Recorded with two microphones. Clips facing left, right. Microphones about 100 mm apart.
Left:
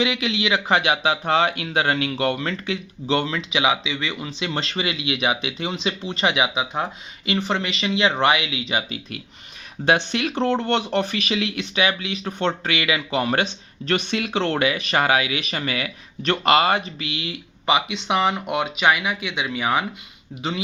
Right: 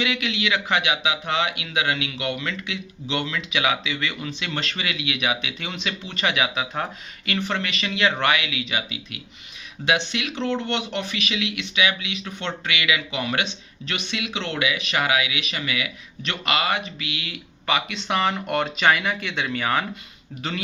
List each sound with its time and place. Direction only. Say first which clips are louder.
0.0 s speech: left 3 dB; 30° left (ahead or behind); by 19.8 s 10° left (ahead or behind)